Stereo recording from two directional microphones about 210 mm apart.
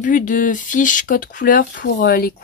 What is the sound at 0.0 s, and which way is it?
Speech, 40° left (ahead or behind).